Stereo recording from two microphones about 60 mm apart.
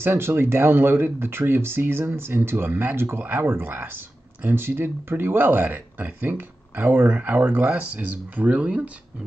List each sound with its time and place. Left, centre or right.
0.0 s speech: right